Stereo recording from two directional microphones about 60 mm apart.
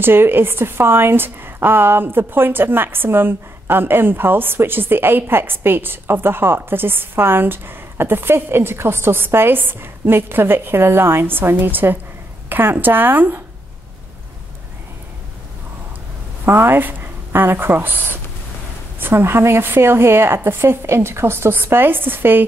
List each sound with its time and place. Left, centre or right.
0.0 s a woman's voice: right
16.4 s a woman's voice: right